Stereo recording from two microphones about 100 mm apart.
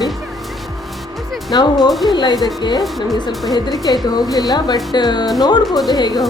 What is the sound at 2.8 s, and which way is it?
Speech, centre (ahead or behind).